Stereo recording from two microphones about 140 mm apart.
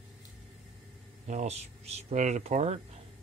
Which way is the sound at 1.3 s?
55° right (ahead or behind).